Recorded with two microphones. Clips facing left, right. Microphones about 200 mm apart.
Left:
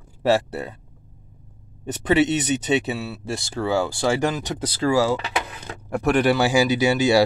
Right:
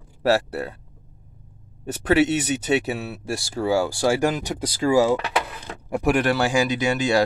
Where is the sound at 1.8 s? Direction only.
5° right (ahead or behind).